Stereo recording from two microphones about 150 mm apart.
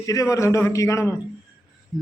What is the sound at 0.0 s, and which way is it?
A man's voice, 20° left (ahead or behind).